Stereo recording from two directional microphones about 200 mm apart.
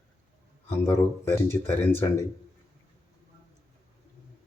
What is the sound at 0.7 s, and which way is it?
Speech, 10° left (ahead or behind).